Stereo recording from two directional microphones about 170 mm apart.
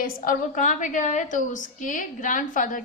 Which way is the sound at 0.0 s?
50° left (ahead or behind).